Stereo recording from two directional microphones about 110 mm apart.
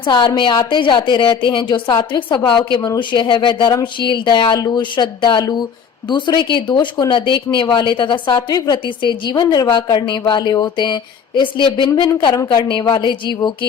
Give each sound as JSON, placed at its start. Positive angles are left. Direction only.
{"t": 0.0, "sound": "speech", "side_deg": 45}